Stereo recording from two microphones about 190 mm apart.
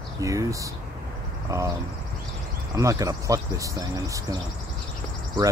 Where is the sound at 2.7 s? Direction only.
15° right (ahead or behind).